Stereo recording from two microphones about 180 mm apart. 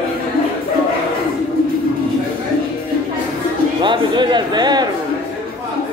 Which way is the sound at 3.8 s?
25° right (ahead or behind).